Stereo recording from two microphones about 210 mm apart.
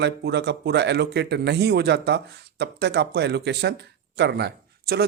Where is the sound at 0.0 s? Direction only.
55° right (ahead or behind).